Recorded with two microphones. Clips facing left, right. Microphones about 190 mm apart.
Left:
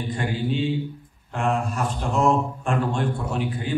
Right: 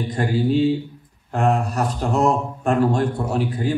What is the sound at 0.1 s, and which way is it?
Speech, 40° right (ahead or behind).